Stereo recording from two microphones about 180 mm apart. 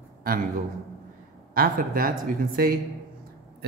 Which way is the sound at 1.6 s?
50° right (ahead or behind).